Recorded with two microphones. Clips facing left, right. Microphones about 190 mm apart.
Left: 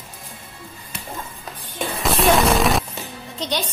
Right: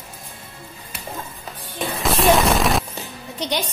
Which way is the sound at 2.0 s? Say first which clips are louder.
Even; centre (ahead or behind).